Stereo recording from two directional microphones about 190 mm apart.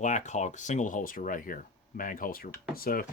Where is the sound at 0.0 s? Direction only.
40° left (ahead or behind).